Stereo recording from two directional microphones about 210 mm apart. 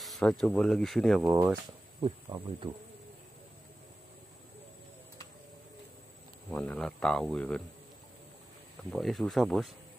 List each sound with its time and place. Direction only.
0.0 s speech: centre (ahead or behind)
2.0 s speech: 20° right (ahead or behind)
6.5 s speech: 5° left (ahead or behind)
8.9 s speech: centre (ahead or behind)